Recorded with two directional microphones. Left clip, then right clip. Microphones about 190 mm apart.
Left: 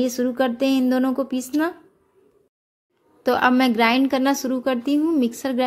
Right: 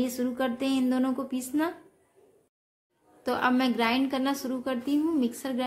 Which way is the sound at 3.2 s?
35° left (ahead or behind).